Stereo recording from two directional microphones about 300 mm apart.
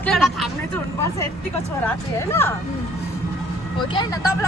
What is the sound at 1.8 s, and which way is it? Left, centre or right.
Speech, centre.